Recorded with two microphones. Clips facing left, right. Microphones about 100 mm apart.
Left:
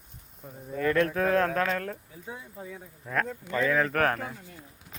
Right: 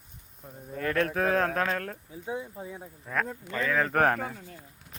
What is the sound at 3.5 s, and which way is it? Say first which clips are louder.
Speech: left 5 dB; 15° left (ahead or behind).